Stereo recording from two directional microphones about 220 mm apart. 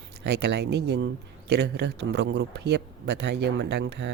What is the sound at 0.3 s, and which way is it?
Speech, 50° right (ahead or behind).